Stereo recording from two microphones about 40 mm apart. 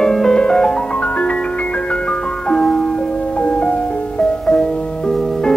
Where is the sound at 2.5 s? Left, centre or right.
Centre.